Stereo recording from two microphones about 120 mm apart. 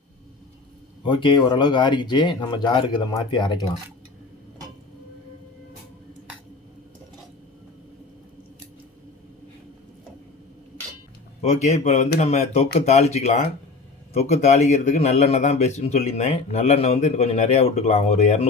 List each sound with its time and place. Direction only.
1.0 s speech: 45° left (ahead or behind)
11.4 s a man's voice: 75° left (ahead or behind)